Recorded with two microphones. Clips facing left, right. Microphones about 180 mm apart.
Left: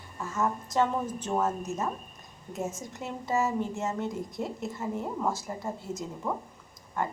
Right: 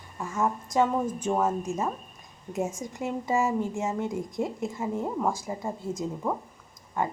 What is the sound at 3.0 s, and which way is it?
A woman's voice, 15° right (ahead or behind).